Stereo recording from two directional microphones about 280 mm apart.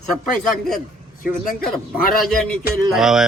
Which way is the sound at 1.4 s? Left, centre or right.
Left.